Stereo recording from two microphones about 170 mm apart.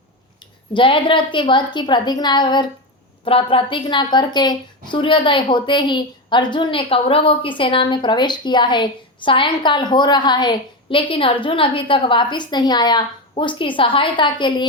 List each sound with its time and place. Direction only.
0.7 s a woman's voice: 30° left (ahead or behind)